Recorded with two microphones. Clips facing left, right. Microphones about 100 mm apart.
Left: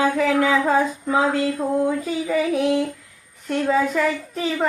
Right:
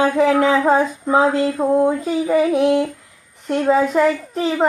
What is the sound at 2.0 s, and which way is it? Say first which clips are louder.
Speech: right 5 dB; 35° right (ahead or behind).